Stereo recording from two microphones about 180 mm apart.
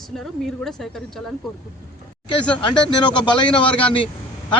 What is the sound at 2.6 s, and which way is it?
Speech, 25° left (ahead or behind).